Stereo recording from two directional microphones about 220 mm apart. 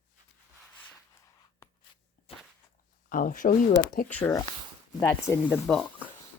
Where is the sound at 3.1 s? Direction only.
40° left (ahead or behind).